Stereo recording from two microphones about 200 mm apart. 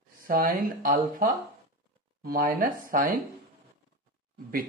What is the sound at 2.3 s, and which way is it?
Speech, 45° right (ahead or behind).